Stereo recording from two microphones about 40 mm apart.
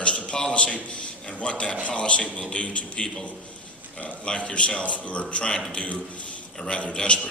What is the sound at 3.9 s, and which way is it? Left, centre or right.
A man's voice, left.